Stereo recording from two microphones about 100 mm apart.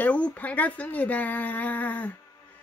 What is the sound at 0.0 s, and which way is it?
Speech, 15° left (ahead or behind).